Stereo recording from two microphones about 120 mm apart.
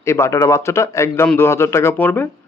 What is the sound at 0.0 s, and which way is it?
Speech, 25° left (ahead or behind).